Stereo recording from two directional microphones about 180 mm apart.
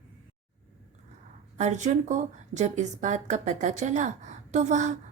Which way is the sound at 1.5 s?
40° right (ahead or behind).